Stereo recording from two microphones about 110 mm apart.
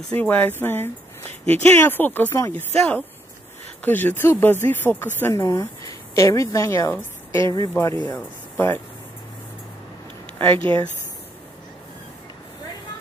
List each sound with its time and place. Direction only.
0.2 s speech: 15° left (ahead or behind)
10.6 s speech: 55° right (ahead or behind)